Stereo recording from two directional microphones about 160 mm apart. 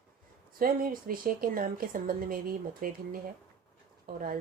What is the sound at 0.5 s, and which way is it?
A woman's voice, 60° right (ahead or behind).